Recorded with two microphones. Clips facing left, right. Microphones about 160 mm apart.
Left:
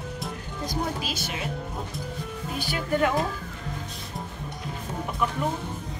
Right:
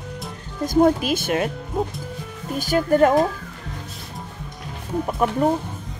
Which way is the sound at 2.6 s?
45° right (ahead or behind).